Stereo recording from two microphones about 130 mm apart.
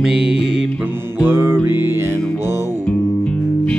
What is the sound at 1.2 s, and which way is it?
Music, 15° right (ahead or behind).